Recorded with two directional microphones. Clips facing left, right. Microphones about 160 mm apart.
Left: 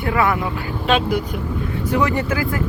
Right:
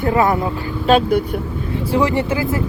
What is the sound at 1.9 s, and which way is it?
Speech, 30° right (ahead or behind).